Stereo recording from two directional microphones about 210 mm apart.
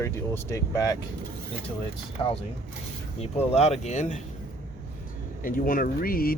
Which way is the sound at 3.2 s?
30° left (ahead or behind).